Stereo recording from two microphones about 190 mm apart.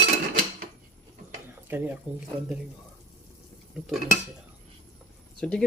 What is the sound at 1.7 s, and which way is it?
Speech, 10° right (ahead or behind).